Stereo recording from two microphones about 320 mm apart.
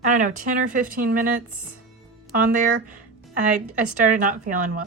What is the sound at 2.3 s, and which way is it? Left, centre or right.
Speech, right.